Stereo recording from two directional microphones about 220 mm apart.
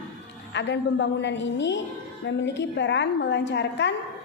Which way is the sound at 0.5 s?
55° left (ahead or behind).